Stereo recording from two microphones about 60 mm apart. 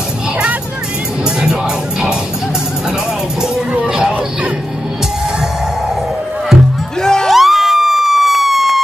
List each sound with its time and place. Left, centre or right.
1.4 s music: centre
3.7 s a sound: centre
7.0 s music: centre
7.2 s emergency vehicle: centre